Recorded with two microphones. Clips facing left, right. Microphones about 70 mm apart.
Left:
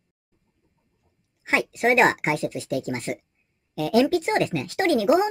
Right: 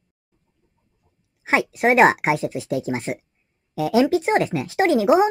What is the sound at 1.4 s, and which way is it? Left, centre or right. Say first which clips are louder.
Speech: right 3 dB; right.